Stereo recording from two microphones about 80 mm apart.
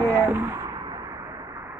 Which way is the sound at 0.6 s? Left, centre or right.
Right.